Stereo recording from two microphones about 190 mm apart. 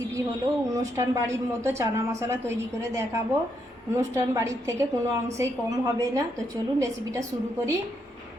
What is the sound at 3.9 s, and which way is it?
A woman's voice, 15° right (ahead or behind).